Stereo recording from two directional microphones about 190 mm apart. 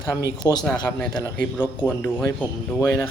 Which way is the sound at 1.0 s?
20° left (ahead or behind).